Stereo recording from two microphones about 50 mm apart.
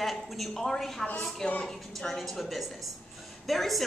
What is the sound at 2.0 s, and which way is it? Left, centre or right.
A woman's voice, centre.